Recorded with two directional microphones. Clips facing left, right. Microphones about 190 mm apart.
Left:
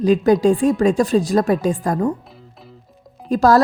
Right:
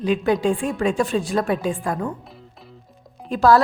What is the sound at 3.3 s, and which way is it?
Speech, 40° left (ahead or behind).